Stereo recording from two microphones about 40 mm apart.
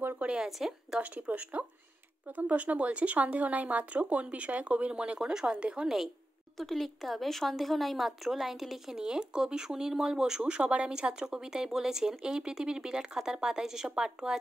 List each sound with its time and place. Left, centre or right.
0.2 s a sound: right
0.9 s speech: right
6.6 s speech: centre
8.9 s speech: centre
10.4 s speech: right